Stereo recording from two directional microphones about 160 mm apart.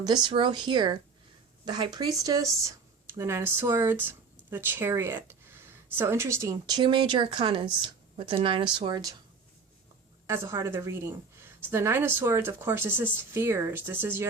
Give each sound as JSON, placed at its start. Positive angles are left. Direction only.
{"t": 0.0, "sound": "speech", "side_deg": -25}
{"t": 10.2, "sound": "speech", "side_deg": -15}